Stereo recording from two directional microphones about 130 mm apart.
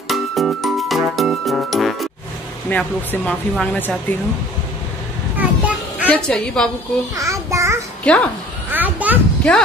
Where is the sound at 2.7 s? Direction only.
10° left (ahead or behind).